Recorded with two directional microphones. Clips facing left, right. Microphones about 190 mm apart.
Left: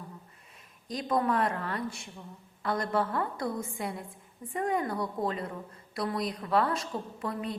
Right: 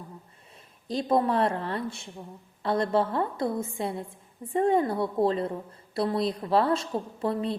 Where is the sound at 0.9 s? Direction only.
30° right (ahead or behind).